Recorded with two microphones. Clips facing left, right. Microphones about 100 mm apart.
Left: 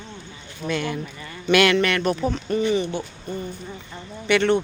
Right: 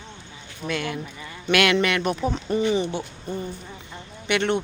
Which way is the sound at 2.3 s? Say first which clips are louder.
Left 1 dB; 25° right (ahead or behind).